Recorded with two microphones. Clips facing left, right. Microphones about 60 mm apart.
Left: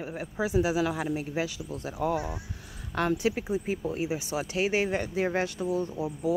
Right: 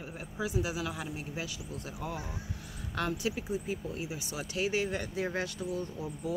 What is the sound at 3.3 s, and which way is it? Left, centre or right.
Speech, left.